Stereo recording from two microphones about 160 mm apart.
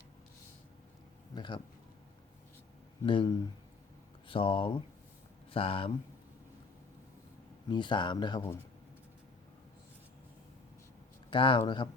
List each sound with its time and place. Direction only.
1.4 s speech: 30° left (ahead or behind)
3.0 s speech: 30° left (ahead or behind)
7.7 s speech: 30° left (ahead or behind)
11.3 s speech: 30° left (ahead or behind)